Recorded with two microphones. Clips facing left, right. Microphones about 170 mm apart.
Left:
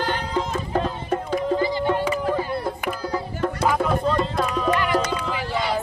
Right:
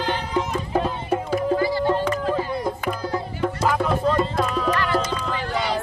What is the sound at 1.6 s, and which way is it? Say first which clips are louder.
Music: right 1 dB; 20° left (ahead or behind).